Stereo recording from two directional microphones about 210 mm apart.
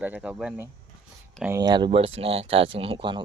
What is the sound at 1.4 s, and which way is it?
Speech, 15° right (ahead or behind).